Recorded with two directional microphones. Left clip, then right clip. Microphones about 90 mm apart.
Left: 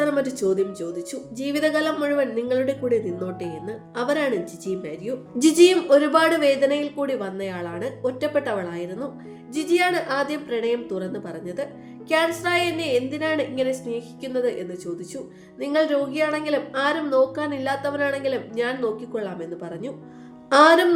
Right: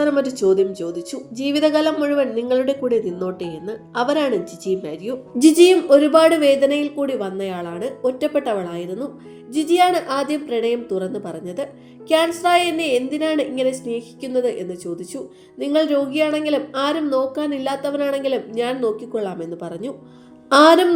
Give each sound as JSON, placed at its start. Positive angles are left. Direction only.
{"t": 0.0, "sound": "a woman's voice", "side_deg": -25}